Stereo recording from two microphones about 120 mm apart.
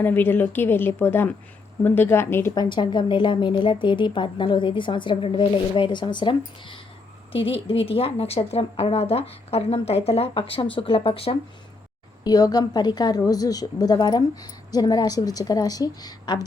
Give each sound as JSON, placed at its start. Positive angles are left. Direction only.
{"t": 0.0, "sound": "a woman's voice", "side_deg": 15}
{"t": 2.6, "sound": "a woman's voice", "side_deg": 40}
{"t": 12.2, "sound": "a woman's voice", "side_deg": 30}